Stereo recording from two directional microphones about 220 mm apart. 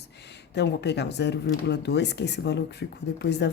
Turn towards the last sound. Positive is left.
turn(degrees=50)  # may be behind; listen again after turning